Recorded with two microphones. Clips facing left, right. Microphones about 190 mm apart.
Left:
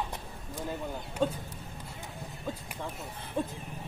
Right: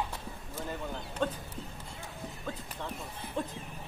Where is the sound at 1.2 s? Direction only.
10° left (ahead or behind).